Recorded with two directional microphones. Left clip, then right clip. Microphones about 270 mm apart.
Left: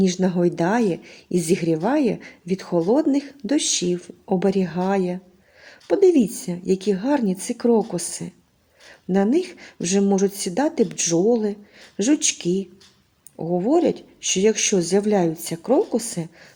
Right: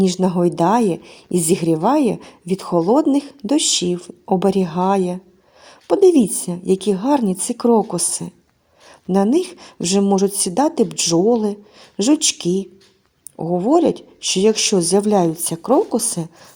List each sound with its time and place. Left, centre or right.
0.0 s speech: centre